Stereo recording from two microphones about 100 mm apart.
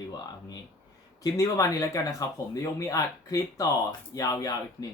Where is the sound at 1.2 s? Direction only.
35° left (ahead or behind).